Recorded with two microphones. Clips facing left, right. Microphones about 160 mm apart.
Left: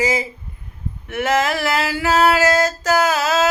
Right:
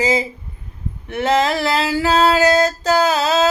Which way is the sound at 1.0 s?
30° right (ahead or behind).